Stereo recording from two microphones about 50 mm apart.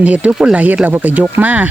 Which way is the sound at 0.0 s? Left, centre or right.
Right.